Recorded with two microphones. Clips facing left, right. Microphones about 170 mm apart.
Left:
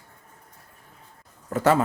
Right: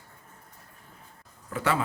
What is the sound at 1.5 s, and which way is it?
Speech, 40° left (ahead or behind).